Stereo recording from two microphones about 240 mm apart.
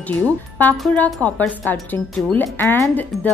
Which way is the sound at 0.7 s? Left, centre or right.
Centre.